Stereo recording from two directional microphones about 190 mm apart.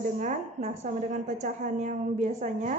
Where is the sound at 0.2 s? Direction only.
40° right (ahead or behind).